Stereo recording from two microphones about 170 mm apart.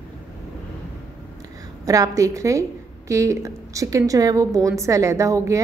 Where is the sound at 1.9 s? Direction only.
20° right (ahead or behind).